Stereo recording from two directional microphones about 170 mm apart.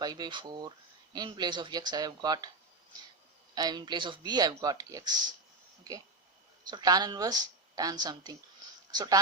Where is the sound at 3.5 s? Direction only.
25° right (ahead or behind).